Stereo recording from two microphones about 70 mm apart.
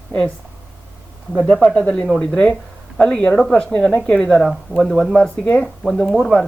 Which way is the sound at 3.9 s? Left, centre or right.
Centre.